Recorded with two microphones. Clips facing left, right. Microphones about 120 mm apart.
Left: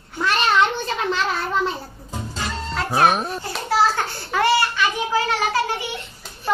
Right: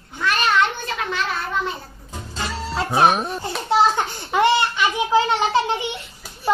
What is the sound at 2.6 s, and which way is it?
Music, 5° right (ahead or behind).